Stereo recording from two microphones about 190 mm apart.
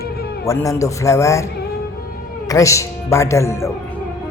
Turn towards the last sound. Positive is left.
turn(degrees=15)  # may be behind; listen again after turning